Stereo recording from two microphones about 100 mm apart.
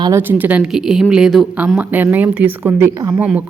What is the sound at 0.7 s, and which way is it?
Speech, 5° right (ahead or behind).